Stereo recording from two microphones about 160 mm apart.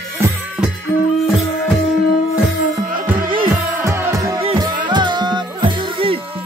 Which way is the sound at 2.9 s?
60° right (ahead or behind).